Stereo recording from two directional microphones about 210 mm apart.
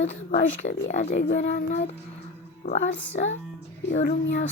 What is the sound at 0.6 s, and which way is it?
Speech, 35° left (ahead or behind).